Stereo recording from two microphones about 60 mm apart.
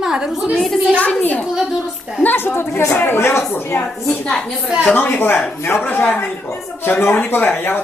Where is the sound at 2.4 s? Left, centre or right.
Left.